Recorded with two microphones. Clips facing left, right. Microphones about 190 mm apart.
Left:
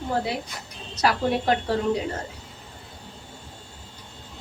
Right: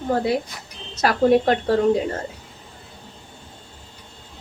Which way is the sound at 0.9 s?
50° right (ahead or behind).